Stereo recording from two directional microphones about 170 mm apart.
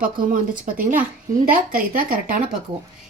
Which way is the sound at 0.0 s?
55° right (ahead or behind).